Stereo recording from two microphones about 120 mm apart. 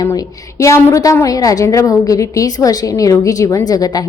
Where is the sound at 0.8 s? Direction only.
25° left (ahead or behind).